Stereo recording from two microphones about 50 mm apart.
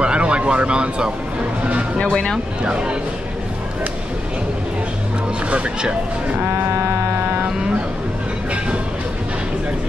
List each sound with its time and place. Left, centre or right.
0.0 s a sound: right
1.6 s speech: right
2.0 s speech: centre
2.6 s speech: centre
5.5 s speech: right